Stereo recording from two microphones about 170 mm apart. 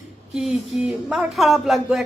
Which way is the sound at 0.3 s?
5° right (ahead or behind).